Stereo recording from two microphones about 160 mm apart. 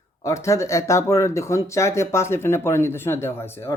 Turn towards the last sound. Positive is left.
turn(degrees=15)  # may be behind; listen again after turning